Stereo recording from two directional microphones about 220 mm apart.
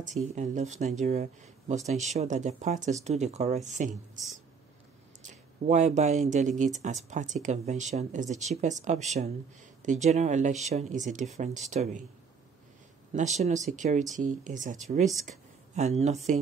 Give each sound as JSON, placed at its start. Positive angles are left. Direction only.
{"t": 0.0, "sound": "speech", "side_deg": -35}
{"t": 5.2, "sound": "speech", "side_deg": -35}
{"t": 13.1, "sound": "speech", "side_deg": -30}